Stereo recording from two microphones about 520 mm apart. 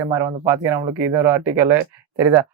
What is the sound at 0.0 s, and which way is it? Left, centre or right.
Speech, centre.